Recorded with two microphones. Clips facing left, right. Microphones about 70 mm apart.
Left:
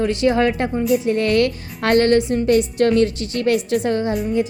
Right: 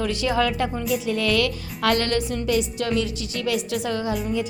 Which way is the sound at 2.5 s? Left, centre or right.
Left.